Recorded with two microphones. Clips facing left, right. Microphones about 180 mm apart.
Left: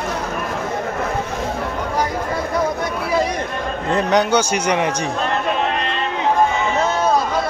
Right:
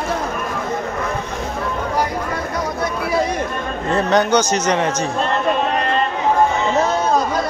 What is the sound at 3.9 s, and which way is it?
A man's voice, 10° left (ahead or behind).